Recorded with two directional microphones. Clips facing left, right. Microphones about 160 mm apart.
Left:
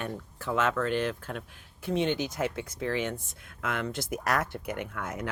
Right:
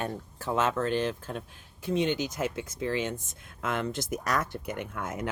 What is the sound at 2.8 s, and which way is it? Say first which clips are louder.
Speech: even; 25° right (ahead or behind).